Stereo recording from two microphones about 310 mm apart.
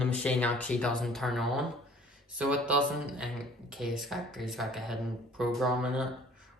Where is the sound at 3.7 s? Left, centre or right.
Centre.